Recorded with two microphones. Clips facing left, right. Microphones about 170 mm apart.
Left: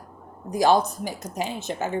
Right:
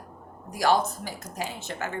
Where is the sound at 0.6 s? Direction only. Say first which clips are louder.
Left 4 dB; 20° left (ahead or behind).